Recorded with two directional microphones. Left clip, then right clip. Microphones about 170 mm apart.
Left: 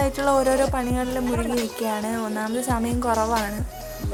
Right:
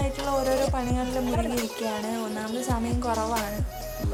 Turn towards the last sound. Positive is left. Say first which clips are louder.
# left 5 dB
turn(degrees=20)  # may be behind; listen again after turning